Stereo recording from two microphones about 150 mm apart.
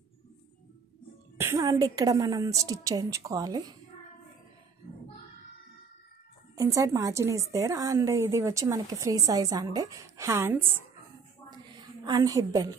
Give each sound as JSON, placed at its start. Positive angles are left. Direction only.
{"t": 1.4, "sound": "a woman's voice", "side_deg": -20}
{"t": 6.5, "sound": "a woman's voice", "side_deg": -20}
{"t": 11.5, "sound": "a sound", "side_deg": -25}